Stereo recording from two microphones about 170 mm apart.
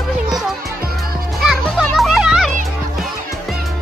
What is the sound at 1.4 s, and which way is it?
Children playing, centre (ahead or behind).